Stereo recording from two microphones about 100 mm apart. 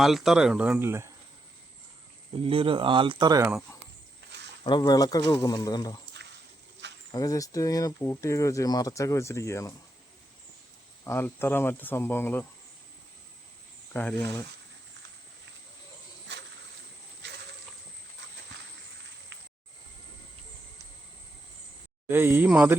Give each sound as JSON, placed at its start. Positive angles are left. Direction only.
{"t": 0.0, "sound": "speech", "side_deg": 0}
{"t": 0.8, "sound": "speech", "side_deg": -25}
{"t": 2.3, "sound": "speech", "side_deg": -65}
{"t": 4.6, "sound": "speech", "side_deg": 45}
{"t": 7.1, "sound": "speech", "side_deg": 35}
{"t": 11.0, "sound": "speech", "side_deg": 25}
{"t": 13.9, "sound": "speech", "side_deg": 10}
{"t": 22.1, "sound": "speech", "side_deg": -25}